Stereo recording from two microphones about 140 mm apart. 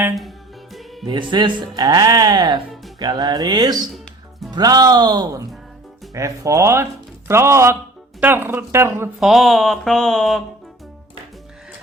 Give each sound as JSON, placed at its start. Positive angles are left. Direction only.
{"t": 0.2, "sound": "music", "side_deg": 0}
{"t": 1.0, "sound": "speech", "side_deg": -35}
{"t": 3.9, "sound": "music", "side_deg": 0}
{"t": 4.5, "sound": "speech", "side_deg": -30}
{"t": 9.2, "sound": "speech", "side_deg": 0}